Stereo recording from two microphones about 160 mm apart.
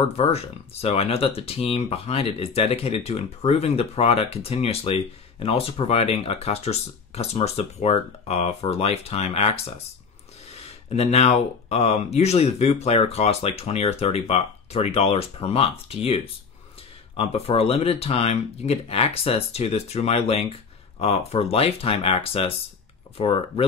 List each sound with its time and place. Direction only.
0.2 s speech: 40° left (ahead or behind)
10.9 s speech: 40° left (ahead or behind)
17.2 s speech: 35° left (ahead or behind)